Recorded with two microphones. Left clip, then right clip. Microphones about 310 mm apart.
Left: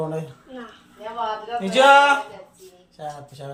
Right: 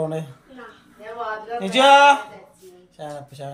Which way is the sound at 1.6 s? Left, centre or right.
Centre.